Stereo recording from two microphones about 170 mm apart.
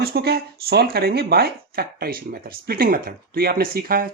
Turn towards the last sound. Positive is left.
turn(degrees=-55)  # may be behind; listen again after turning